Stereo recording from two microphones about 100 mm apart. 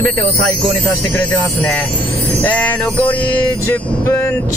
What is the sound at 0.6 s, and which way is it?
Speech, centre (ahead or behind).